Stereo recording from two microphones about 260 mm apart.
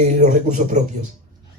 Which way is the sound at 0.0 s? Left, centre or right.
Right.